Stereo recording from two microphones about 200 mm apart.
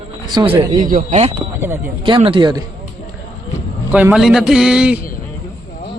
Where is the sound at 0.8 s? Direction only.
45° right (ahead or behind).